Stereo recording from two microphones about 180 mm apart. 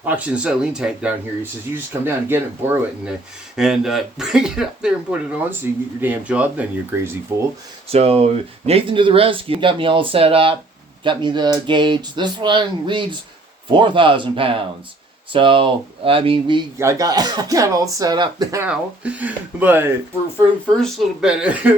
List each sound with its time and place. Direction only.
0.0 s speech: 5° right (ahead or behind)
3.5 s speech: 5° right (ahead or behind)
7.9 s speech: 35° right (ahead or behind)
16.7 s speech: 20° right (ahead or behind)
18.7 s speech: 5° right (ahead or behind)